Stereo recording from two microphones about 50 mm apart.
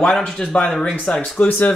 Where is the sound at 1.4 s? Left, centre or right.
Left.